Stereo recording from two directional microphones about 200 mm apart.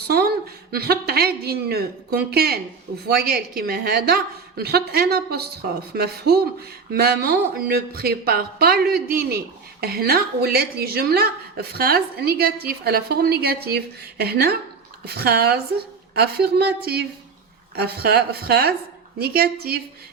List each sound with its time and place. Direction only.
0.1 s a woman's voice: 50° right (ahead or behind)